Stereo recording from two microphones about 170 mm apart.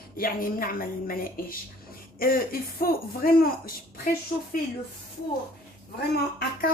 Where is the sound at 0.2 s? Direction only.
60° left (ahead or behind).